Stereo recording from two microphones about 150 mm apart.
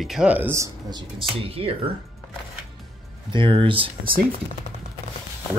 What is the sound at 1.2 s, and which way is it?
Speech, 40° right (ahead or behind).